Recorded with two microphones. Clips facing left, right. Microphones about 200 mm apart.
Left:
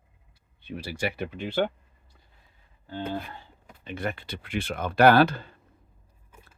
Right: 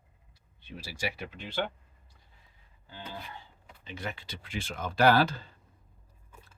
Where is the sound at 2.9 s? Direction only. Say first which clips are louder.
Left 11 dB; 55° left (ahead or behind).